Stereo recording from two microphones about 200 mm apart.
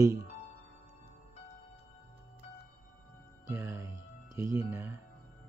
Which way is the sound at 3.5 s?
15° right (ahead or behind).